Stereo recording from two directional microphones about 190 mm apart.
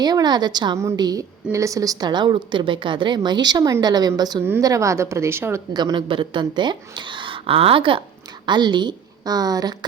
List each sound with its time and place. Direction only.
0.0 s a woman's voice: 20° right (ahead or behind)